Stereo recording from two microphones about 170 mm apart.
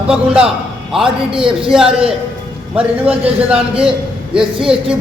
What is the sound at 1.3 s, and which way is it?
Speech, 30° right (ahead or behind).